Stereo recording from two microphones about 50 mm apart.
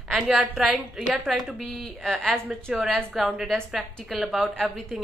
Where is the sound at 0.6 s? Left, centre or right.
Centre.